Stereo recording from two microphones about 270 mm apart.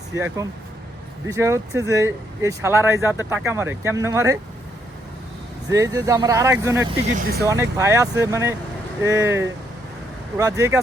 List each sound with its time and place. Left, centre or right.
0.1 s speech: centre
5.7 s speech: centre
7.2 s speech: right
7.4 s speech: centre